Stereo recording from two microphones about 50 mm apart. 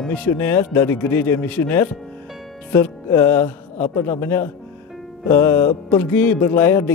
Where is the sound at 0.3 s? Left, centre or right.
Left.